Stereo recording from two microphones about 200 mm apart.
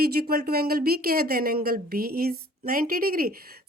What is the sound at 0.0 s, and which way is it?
A woman's voice, 50° right (ahead or behind).